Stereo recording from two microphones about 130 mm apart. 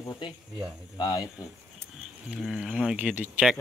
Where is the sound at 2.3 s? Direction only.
5° right (ahead or behind).